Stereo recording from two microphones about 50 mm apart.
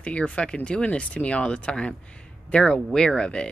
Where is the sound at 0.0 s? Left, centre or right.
Left.